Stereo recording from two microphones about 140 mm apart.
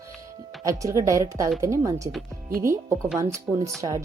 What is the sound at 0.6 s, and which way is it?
Speech, 25° right (ahead or behind).